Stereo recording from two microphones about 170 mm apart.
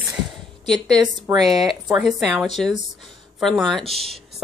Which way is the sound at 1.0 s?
25° right (ahead or behind).